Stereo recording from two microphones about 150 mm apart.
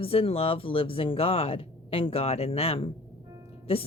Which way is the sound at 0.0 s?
40° left (ahead or behind).